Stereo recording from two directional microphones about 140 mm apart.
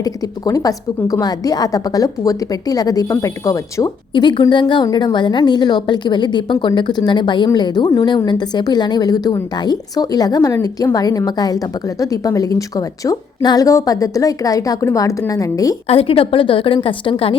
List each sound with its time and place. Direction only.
0.0 s a woman's voice: 25° left (ahead or behind)
15.9 s a woman's voice: 40° left (ahead or behind)